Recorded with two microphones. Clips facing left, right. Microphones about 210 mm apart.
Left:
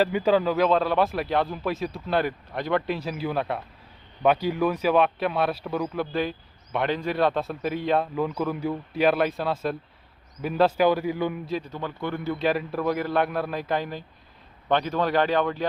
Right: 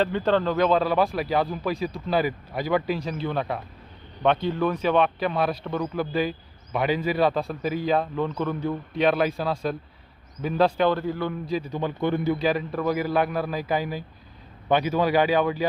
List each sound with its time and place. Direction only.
0.0 s a man's voice: 10° left (ahead or behind)
11.4 s speech: centre (ahead or behind)
11.7 s speech: 15° right (ahead or behind)
12.4 s speech: centre (ahead or behind)